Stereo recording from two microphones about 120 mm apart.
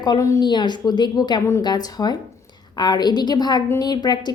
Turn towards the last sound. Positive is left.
turn(degrees=35)  # may be behind; listen again after turning